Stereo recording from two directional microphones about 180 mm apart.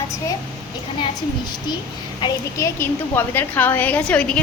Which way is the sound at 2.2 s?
15° left (ahead or behind).